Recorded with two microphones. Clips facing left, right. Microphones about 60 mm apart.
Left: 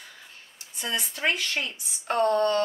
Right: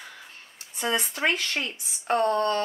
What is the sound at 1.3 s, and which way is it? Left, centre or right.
Speech, right.